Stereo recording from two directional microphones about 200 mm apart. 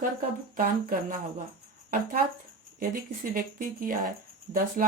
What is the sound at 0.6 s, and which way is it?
Speech, 45° right (ahead or behind).